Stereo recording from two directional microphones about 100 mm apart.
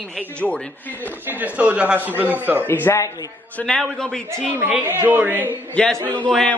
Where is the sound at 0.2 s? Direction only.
15° left (ahead or behind).